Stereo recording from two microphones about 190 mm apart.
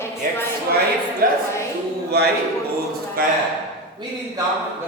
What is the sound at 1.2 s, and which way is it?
A woman's voice, 50° right (ahead or behind).